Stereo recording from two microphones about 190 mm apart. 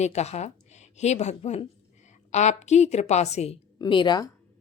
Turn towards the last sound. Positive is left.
turn(degrees=20)  # may be behind; listen again after turning